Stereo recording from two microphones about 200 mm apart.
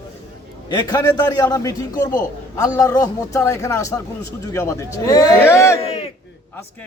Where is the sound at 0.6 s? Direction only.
20° left (ahead or behind).